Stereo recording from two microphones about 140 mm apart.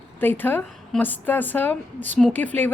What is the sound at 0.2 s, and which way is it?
A woman's voice, 15° left (ahead or behind).